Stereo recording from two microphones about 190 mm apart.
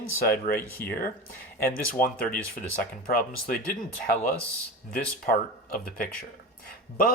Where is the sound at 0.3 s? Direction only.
50° left (ahead or behind).